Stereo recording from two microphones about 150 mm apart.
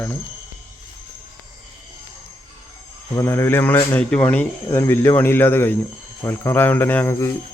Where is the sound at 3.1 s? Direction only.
15° left (ahead or behind).